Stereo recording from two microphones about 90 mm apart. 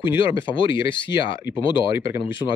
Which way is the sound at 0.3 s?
65° left (ahead or behind).